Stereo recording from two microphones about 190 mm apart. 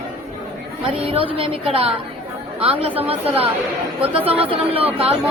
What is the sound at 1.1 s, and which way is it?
A woman's voice, 30° right (ahead or behind).